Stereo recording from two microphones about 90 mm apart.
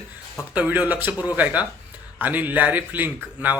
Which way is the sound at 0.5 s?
15° right (ahead or behind).